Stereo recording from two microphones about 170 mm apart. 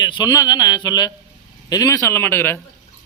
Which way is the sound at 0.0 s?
25° left (ahead or behind).